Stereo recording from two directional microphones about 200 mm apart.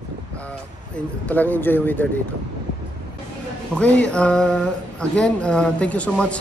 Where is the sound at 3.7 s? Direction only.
5° left (ahead or behind).